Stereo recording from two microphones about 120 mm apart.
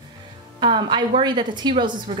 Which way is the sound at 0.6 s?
40° right (ahead or behind).